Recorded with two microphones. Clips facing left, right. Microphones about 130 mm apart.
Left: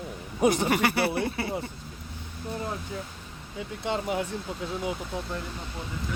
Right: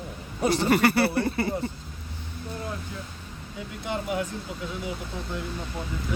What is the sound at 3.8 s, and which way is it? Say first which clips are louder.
Speech: even; 25° left (ahead or behind).